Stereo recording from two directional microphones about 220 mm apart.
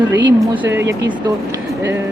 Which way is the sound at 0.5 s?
10° right (ahead or behind).